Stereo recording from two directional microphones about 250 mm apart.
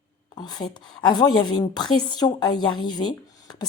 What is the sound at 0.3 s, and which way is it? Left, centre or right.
Speech, centre.